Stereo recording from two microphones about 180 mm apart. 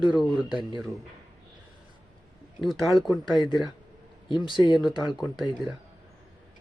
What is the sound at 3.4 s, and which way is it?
Speech, 25° left (ahead or behind).